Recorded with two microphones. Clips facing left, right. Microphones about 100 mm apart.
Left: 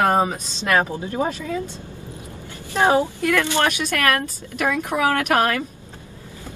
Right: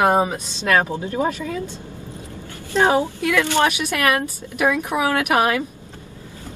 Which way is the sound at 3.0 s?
15° right (ahead or behind).